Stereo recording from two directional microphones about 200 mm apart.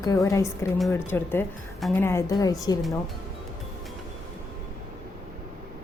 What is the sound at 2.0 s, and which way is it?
Speech, 15° left (ahead or behind).